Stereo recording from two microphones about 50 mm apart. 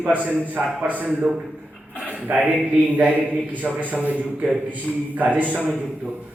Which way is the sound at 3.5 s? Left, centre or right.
Right.